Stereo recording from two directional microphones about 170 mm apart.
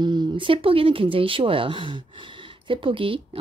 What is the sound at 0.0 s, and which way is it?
Speech, 25° right (ahead or behind).